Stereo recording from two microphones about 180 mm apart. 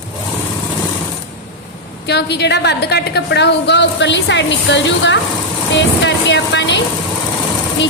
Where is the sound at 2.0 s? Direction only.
70° left (ahead or behind).